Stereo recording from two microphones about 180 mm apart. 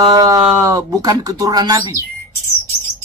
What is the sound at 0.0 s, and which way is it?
Speech, 20° right (ahead or behind).